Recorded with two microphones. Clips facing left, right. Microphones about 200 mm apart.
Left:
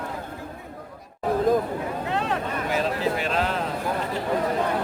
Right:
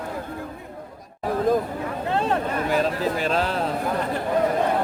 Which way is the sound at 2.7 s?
40° right (ahead or behind).